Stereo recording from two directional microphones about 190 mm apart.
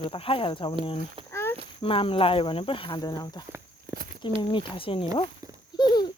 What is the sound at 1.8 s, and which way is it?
Speech, 30° left (ahead or behind).